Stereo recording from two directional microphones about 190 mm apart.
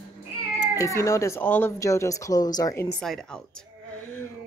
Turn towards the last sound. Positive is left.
turn(degrees=0)  # may be behind; listen again after turning